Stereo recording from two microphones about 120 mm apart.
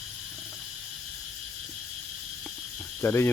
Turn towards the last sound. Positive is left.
turn(degrees=20)  # may be behind; listen again after turning